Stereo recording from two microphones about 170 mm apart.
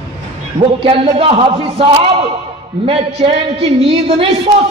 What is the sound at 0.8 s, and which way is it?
A man's voice, 35° right (ahead or behind).